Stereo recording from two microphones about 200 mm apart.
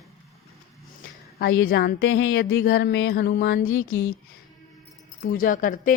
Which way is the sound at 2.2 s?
70° left (ahead or behind).